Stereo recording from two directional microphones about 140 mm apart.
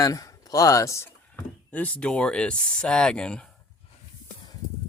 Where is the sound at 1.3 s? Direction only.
10° left (ahead or behind).